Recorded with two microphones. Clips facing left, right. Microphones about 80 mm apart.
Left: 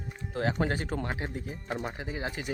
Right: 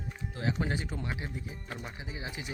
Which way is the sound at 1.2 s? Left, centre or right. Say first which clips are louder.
Left 4 dB; left.